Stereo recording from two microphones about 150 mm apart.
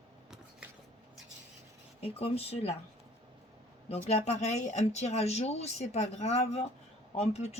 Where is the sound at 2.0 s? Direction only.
40° left (ahead or behind).